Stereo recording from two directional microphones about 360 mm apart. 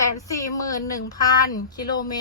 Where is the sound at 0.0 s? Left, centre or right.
Centre.